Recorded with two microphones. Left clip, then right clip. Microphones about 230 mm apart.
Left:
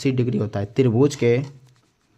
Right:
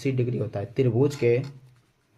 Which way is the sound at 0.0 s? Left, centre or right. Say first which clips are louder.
Left 5 dB; left.